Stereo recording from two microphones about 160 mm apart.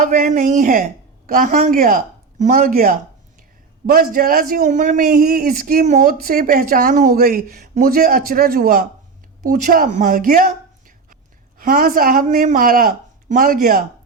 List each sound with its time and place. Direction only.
0.0 s a man's voice: 60° right (ahead or behind)